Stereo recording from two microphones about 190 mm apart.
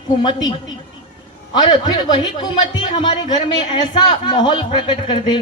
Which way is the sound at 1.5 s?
25° left (ahead or behind).